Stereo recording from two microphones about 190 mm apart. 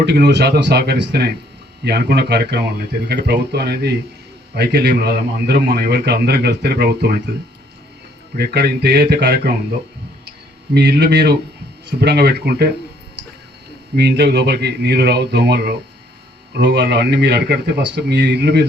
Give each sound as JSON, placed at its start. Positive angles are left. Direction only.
{"t": 0.0, "sound": "a man's voice", "side_deg": -60}
{"t": 8.4, "sound": "a man's voice", "side_deg": -60}
{"t": 10.8, "sound": "a man's voice", "side_deg": -60}
{"t": 13.9, "sound": "a man's voice", "side_deg": -65}